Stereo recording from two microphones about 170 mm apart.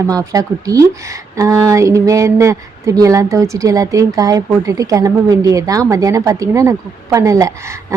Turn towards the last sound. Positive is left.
turn(degrees=-20)  # may be behind; listen again after turning